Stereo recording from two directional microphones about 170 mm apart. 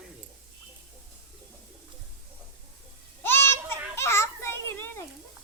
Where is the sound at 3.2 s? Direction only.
15° left (ahead or behind).